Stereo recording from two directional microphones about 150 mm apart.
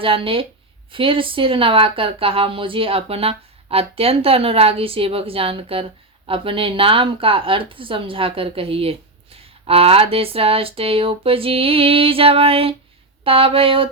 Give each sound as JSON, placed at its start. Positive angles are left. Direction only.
{"t": 0.0, "sound": "speech", "side_deg": -35}